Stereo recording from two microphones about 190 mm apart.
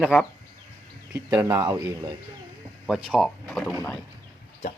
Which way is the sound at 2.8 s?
5° right (ahead or behind).